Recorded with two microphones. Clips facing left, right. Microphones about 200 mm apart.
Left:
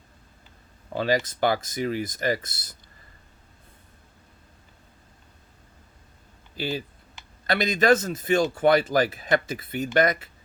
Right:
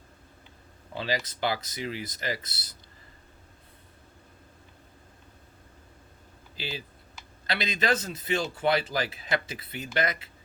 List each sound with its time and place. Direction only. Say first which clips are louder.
0.9 s speech: left 7 dB; 50° left (ahead or behind)
6.6 s speech: left 8 dB; 50° left (ahead or behind)